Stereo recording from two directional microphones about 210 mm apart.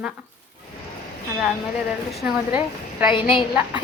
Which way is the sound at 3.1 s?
25° left (ahead or behind).